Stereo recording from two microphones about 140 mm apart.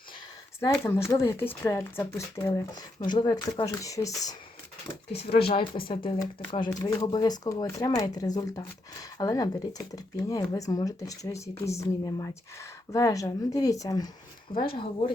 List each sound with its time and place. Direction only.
0.9 s speech: 20° left (ahead or behind)
3.0 s speech: 30° left (ahead or behind)
5.2 s speech: 45° left (ahead or behind); by 14.1 s 25° left (ahead or behind)
14.8 s speech: 35° left (ahead or behind)